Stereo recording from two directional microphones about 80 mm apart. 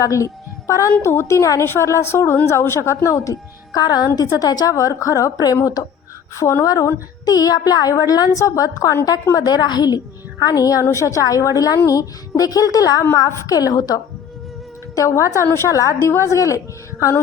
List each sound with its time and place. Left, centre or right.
0.0 s a woman's voice: left
3.8 s a woman's voice: left
10.4 s a woman's voice: left
14.9 s a woman's voice: left